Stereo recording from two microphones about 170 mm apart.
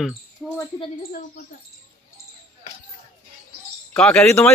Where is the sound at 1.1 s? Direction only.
60° left (ahead or behind).